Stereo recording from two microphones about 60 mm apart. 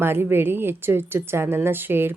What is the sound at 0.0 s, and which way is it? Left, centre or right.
Speech, right.